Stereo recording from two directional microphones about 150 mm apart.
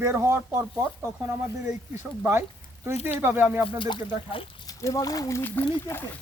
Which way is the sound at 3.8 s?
35° left (ahead or behind).